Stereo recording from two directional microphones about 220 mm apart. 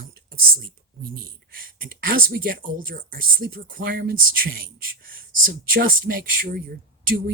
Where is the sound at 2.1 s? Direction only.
40° right (ahead or behind).